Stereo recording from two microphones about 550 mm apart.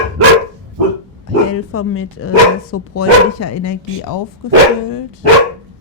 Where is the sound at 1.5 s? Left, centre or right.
Left.